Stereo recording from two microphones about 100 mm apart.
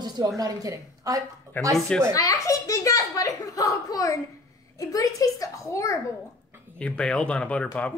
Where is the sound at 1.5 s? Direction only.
30° right (ahead or behind).